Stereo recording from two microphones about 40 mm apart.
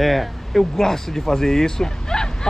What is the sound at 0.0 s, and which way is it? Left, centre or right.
Speech, centre.